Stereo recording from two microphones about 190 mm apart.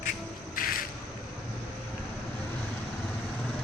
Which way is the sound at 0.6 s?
50° left (ahead or behind).